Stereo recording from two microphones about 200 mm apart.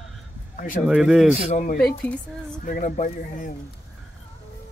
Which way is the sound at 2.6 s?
40° left (ahead or behind).